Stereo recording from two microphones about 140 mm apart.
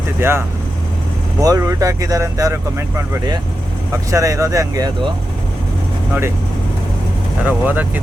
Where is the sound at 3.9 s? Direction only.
25° right (ahead or behind).